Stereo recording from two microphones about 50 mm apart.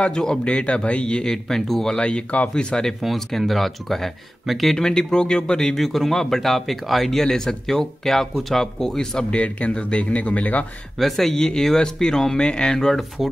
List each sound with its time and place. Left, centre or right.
0.0 s speech: centre
2.0 s speech: left
3.0 s speech: centre
4.7 s speech: centre
9.3 s speech: left
11.0 s speech: centre